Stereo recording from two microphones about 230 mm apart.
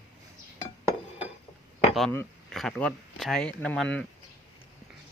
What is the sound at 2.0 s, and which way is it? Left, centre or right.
Speech, centre.